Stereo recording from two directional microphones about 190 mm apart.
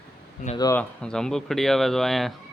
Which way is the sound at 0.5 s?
20° left (ahead or behind).